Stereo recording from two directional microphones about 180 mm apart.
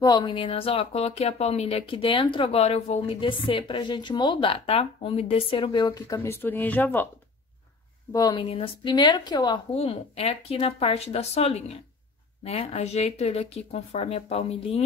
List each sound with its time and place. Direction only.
0.0 s speech: 20° left (ahead or behind)
5.9 s speech: 15° left (ahead or behind)
8.1 s speech: 20° left (ahead or behind)
8.5 s a woman's voice: 30° left (ahead or behind)